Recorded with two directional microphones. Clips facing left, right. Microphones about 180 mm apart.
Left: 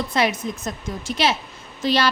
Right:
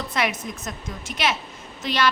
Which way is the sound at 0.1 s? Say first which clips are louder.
Left 3 dB; 30° left (ahead or behind).